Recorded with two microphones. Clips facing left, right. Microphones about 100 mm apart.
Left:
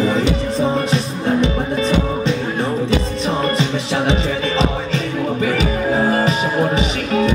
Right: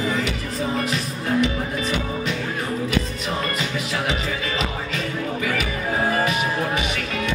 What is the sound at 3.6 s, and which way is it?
Music, 30° left (ahead or behind).